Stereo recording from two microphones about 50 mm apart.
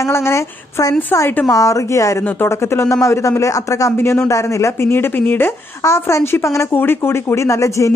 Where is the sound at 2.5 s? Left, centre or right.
Left.